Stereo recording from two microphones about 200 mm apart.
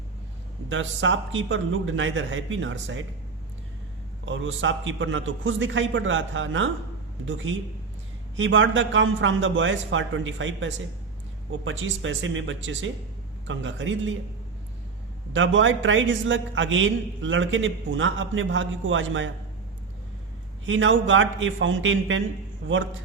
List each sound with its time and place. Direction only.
0.7 s a man's voice: 75° right (ahead or behind)
4.3 s a man's voice: 70° right (ahead or behind)
15.3 s a man's voice: 70° right (ahead or behind)
20.7 s a man's voice: 70° right (ahead or behind)